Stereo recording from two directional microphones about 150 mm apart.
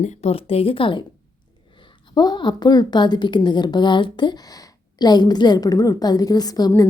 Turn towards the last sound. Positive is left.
turn(degrees=25)  # may be behind; listen again after turning